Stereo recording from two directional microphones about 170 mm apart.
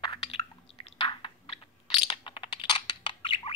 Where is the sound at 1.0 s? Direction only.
30° left (ahead or behind).